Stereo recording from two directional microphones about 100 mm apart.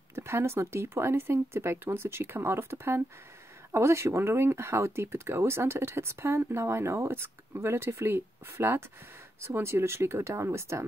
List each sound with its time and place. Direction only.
0.1 s speech: 25° right (ahead or behind)